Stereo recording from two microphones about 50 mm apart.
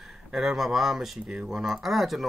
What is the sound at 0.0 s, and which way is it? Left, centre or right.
Speech, centre.